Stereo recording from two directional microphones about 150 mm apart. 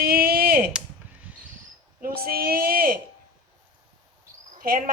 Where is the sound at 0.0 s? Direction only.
80° right.